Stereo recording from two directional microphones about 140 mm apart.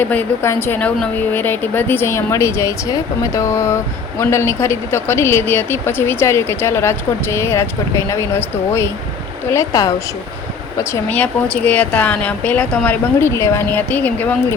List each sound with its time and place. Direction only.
0.0 s a woman's voice: 10° left (ahead or behind)
11.1 s a woman's voice: 10° left (ahead or behind)